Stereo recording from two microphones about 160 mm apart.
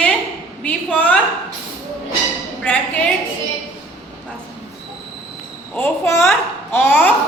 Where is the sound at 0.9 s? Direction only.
10° left (ahead or behind).